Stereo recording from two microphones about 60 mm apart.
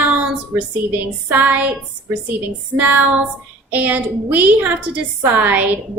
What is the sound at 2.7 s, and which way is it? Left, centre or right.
A woman's voice, right.